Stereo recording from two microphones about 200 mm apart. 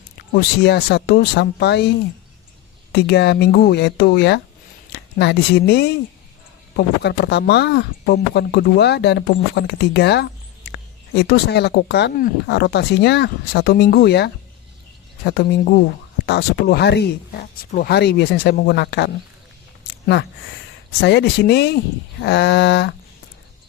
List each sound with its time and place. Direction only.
0.3 s speech: 55° left (ahead or behind)
2.9 s speech: 55° left (ahead or behind)
20.1 s speech: 55° left (ahead or behind)